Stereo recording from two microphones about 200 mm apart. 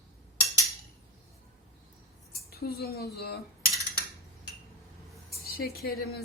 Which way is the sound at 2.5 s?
50° left (ahead or behind).